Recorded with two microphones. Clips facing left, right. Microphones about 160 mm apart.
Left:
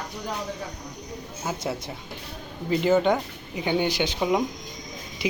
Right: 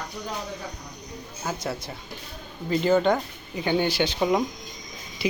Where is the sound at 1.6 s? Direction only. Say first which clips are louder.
Left 1 dB; 25° left (ahead or behind).